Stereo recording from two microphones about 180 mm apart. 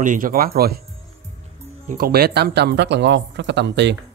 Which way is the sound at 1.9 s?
55° right (ahead or behind).